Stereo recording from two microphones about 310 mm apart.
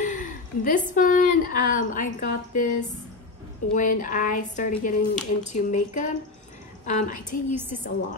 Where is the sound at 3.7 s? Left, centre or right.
Left.